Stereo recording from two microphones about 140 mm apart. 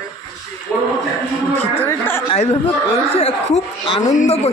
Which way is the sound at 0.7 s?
10° left (ahead or behind).